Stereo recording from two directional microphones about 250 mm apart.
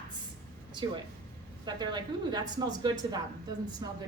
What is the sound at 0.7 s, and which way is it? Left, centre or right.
A woman's voice, centre.